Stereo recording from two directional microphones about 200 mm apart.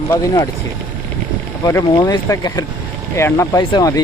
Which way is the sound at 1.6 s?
15° left (ahead or behind).